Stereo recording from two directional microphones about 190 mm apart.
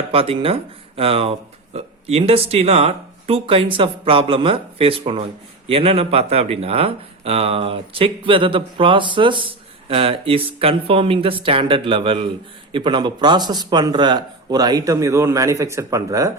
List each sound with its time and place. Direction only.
0.1 s speech: 30° right (ahead or behind)